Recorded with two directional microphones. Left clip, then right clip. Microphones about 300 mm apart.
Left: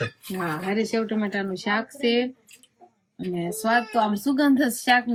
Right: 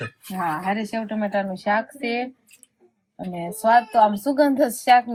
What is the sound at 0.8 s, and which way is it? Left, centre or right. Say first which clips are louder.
Speech: left 2 dB; centre.